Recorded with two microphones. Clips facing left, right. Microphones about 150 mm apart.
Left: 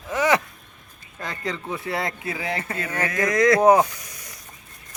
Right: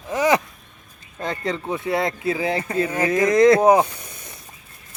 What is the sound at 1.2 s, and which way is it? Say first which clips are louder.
A man's voice: right 5 dB; 25° right (ahead or behind).